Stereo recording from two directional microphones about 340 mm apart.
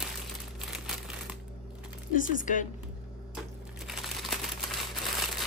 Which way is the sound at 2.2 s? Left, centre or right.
Left.